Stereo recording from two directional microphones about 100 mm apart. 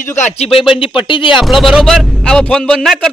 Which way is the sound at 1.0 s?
55° left (ahead or behind).